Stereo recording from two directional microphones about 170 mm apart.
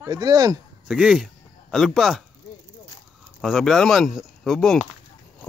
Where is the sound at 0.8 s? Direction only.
5° right (ahead or behind).